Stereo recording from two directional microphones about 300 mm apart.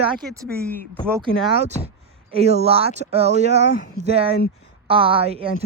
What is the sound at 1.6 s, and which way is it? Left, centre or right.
Speech, centre.